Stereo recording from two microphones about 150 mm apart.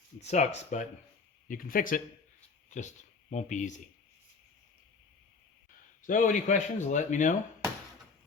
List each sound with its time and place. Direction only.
0.2 s speech: 50° left (ahead or behind)
1.5 s speech: 70° left (ahead or behind)
2.6 s speech: 55° left (ahead or behind)
6.1 s speech: 60° left (ahead or behind)